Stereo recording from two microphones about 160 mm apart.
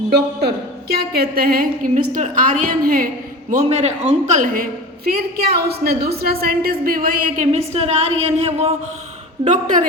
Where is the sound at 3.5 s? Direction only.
45° right (ahead or behind).